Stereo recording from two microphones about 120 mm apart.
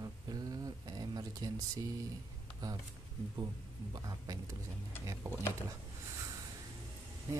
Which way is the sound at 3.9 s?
30° right (ahead or behind).